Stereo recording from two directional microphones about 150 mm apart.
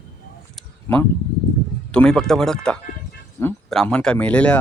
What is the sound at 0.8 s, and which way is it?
Speech, 15° left (ahead or behind).